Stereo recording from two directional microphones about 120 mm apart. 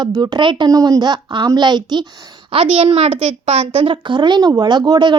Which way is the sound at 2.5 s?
50° right (ahead or behind).